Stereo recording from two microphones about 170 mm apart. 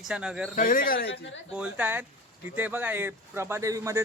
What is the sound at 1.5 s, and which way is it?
A man's voice, 5° right (ahead or behind).